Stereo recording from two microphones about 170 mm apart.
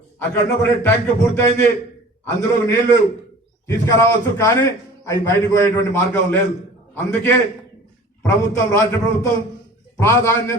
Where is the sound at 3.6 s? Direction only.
15° left (ahead or behind).